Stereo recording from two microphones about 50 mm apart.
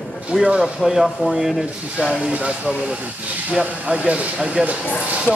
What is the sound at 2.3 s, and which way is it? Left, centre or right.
Speech, right.